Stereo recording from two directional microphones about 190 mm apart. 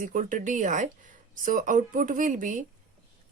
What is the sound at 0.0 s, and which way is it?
Speech, 45° right (ahead or behind).